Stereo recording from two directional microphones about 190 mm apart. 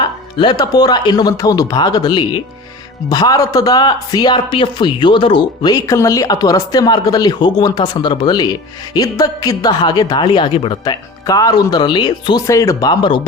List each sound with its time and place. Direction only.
0.3 s speech: 20° left (ahead or behind)